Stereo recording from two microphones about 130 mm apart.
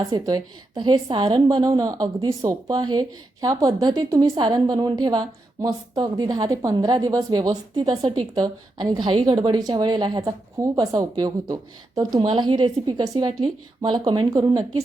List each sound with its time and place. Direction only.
0.0 s a woman's voice: 30° right (ahead or behind)